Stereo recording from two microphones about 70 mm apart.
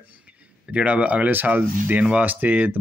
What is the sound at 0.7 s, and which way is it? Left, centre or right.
Speech, centre.